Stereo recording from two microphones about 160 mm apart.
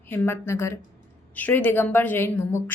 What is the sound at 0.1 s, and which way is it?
Speech, 15° left (ahead or behind).